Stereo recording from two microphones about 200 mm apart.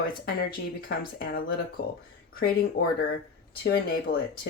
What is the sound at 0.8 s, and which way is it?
Speech, 50° left (ahead or behind).